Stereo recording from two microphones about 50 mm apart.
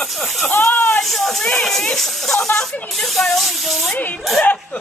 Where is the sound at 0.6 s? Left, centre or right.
Left.